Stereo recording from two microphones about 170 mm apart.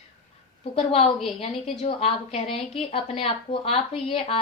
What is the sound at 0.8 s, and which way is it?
Speech, 30° left (ahead or behind).